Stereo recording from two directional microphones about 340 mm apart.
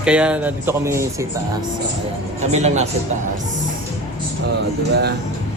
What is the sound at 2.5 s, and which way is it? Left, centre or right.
Speech, centre.